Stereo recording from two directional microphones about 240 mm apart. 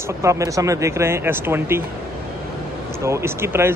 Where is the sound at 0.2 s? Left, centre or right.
Centre.